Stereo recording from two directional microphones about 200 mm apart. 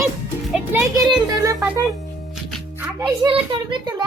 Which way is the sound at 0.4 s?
5° right (ahead or behind).